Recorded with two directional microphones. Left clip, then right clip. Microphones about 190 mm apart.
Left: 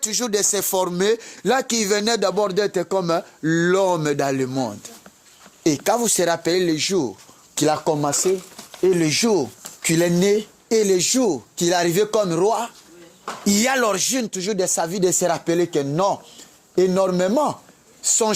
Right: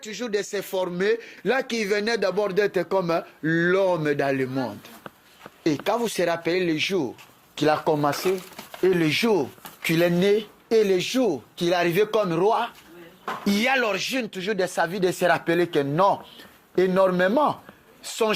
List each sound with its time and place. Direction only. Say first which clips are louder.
0.0 s speech: left 6 dB; 55° left (ahead or behind)